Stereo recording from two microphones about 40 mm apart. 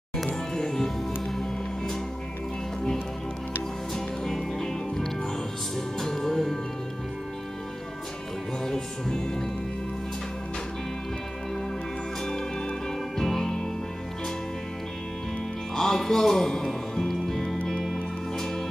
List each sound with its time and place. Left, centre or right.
0.6 s music: centre
3.9 s music: centre
8.6 s music: centre
13.2 s music: centre
15.7 s music: centre